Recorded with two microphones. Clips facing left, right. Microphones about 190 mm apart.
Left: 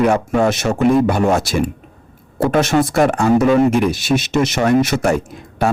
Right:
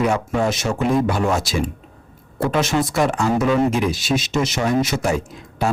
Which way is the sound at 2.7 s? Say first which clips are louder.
Left 5 dB; 50° left (ahead or behind).